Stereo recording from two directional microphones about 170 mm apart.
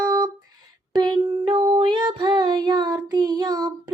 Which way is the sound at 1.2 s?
25° right (ahead or behind).